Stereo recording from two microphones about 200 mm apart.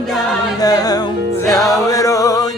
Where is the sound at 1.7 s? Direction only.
15° left (ahead or behind).